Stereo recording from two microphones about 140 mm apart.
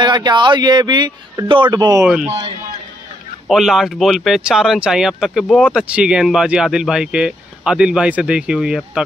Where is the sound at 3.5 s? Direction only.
Centre (ahead or behind).